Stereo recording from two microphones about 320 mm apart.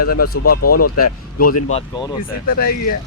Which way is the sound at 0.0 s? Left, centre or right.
Left.